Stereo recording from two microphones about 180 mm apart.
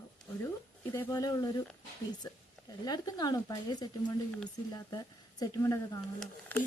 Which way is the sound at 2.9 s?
20° left (ahead or behind).